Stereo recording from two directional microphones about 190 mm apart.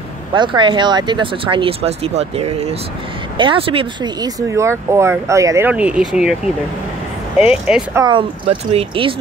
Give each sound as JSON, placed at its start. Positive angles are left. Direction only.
{"t": 0.3, "sound": "speech", "side_deg": -25}
{"t": 7.9, "sound": "speech", "side_deg": -20}